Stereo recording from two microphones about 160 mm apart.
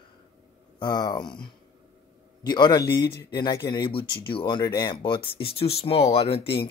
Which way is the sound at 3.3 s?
25° left (ahead or behind).